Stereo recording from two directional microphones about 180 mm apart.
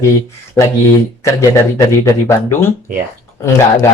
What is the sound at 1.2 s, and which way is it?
Speech, 15° left (ahead or behind).